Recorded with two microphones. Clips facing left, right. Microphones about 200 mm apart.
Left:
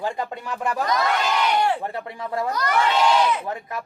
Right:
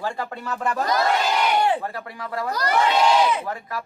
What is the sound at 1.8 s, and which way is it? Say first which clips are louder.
Speech: left 2 dB; 25° left (ahead or behind).